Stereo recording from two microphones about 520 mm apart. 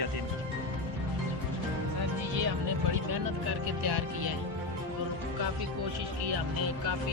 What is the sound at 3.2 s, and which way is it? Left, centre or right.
Music, right.